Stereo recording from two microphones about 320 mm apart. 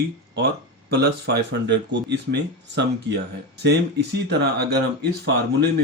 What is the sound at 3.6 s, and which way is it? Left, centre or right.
Speech, right.